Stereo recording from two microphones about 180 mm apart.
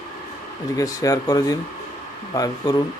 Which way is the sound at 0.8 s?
20° left (ahead or behind).